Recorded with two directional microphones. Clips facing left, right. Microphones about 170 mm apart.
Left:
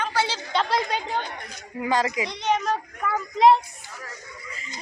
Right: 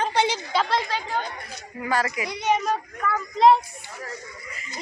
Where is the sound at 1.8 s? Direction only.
20° left (ahead or behind).